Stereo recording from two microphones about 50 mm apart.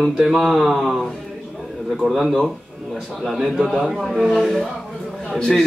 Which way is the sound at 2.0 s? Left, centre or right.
Centre.